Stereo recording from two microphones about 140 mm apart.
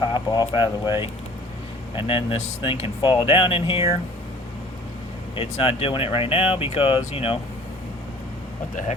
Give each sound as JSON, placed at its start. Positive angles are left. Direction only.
{"t": 0.0, "sound": "speech", "side_deg": 30}
{"t": 5.3, "sound": "speech", "side_deg": 40}